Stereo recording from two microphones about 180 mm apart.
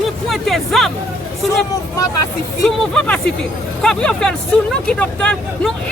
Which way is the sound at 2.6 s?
5° left (ahead or behind).